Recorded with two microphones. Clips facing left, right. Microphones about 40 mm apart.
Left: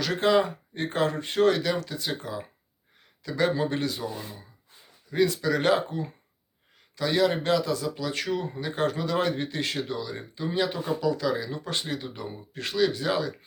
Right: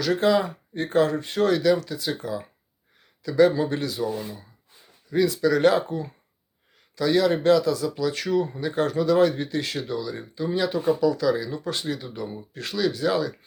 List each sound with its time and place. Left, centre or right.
0.0 s speech: left
5.1 s speech: left
5.4 s speech: centre